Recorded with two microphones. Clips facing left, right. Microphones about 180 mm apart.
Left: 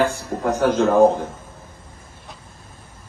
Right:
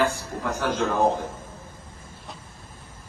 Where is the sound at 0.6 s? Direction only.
50° left (ahead or behind).